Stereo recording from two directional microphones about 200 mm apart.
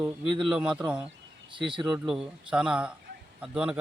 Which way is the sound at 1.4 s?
25° right (ahead or behind).